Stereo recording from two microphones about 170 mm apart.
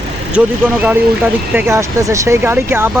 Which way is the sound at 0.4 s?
5° right (ahead or behind).